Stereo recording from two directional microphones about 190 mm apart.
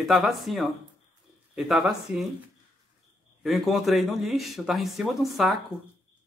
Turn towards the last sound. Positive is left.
turn(degrees=0)  # may be behind; listen again after turning